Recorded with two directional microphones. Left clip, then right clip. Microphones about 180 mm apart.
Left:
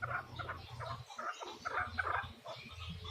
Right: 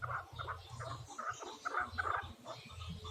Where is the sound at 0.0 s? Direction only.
25° right (ahead or behind).